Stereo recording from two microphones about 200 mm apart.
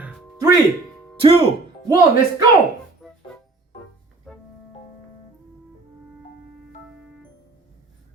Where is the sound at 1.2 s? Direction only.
25° right (ahead or behind).